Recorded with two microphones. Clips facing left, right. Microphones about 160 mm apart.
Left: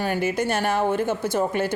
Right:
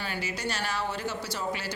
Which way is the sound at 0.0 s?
50° left (ahead or behind).